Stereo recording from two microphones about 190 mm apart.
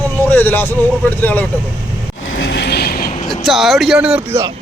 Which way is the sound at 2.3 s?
60° left (ahead or behind).